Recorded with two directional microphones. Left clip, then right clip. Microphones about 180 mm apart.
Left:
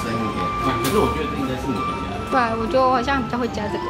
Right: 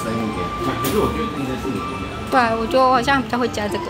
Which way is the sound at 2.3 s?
5° right (ahead or behind).